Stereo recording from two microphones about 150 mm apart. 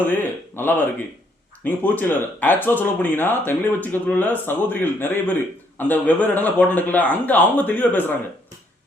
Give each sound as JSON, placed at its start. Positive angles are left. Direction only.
{"t": 0.0, "sound": "speech", "side_deg": 15}